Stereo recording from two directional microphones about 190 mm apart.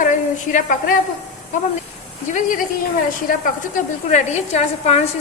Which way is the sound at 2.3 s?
45° left (ahead or behind).